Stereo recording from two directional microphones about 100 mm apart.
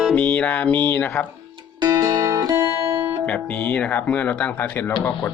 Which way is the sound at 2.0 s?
35° right (ahead or behind).